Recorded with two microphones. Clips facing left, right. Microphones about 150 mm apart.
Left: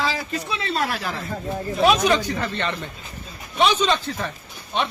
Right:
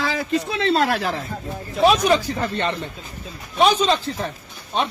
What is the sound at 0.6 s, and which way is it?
Speech, 75° right (ahead or behind).